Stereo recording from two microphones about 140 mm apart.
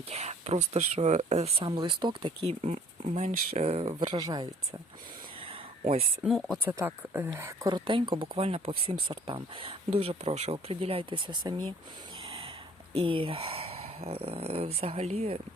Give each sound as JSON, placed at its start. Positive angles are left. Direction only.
{"t": 0.1, "sound": "speech", "side_deg": -50}
{"t": 1.6, "sound": "speech", "side_deg": -35}
{"t": 2.5, "sound": "speech", "side_deg": -50}
{"t": 4.1, "sound": "speech", "side_deg": -30}
{"t": 5.8, "sound": "speech", "side_deg": -90}
{"t": 6.2, "sound": "speech", "side_deg": 0}
{"t": 6.7, "sound": "speech", "side_deg": -15}
{"t": 7.7, "sound": "speech", "side_deg": -35}
{"t": 12.2, "sound": "a sound", "side_deg": -45}
{"t": 12.9, "sound": "speech", "side_deg": -40}